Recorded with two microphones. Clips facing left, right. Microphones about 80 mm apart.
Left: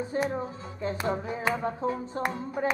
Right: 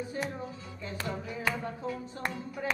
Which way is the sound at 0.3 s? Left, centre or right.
Left.